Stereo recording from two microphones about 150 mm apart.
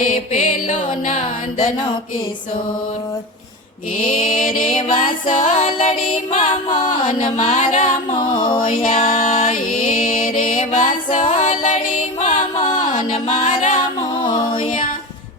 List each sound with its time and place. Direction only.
0.0 s music: 60° left (ahead or behind)
4.9 s music: 60° left (ahead or behind)
8.4 s music: 30° left (ahead or behind)
8.8 s music: 55° left (ahead or behind)
14.2 s music: 30° left (ahead or behind)